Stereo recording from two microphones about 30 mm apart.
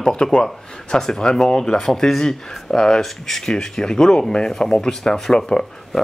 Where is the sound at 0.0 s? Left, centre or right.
Centre.